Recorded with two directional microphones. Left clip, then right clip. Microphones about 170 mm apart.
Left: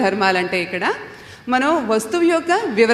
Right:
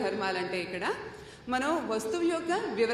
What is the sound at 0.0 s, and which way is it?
A woman's voice, 40° left (ahead or behind).